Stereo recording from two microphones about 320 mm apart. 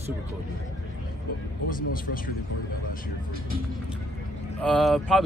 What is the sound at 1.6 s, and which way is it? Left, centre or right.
Speech, left.